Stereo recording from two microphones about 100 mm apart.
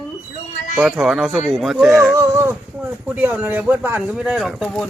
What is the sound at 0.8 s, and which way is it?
Speech, 10° right (ahead or behind).